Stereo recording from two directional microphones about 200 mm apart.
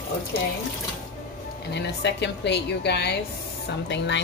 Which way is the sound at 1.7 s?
55° left (ahead or behind).